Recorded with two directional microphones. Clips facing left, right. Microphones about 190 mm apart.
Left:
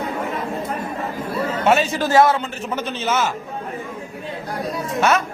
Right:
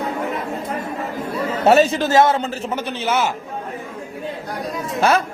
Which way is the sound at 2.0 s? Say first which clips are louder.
Even; 25° right (ahead or behind).